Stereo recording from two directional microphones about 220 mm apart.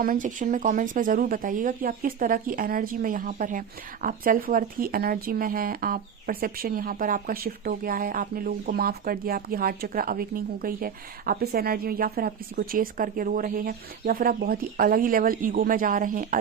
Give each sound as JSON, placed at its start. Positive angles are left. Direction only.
{"t": 0.0, "sound": "speech", "side_deg": -40}